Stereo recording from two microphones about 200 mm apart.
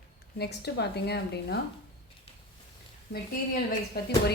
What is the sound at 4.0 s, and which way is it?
Speech, 55° left (ahead or behind).